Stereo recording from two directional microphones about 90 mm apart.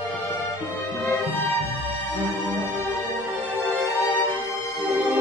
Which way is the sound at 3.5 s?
20° left (ahead or behind).